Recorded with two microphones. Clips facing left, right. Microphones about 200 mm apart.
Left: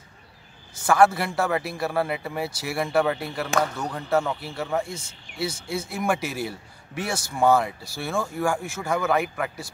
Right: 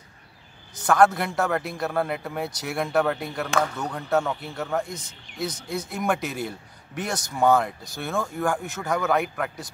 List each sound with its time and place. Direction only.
0.8 s a man's voice: 5° left (ahead or behind)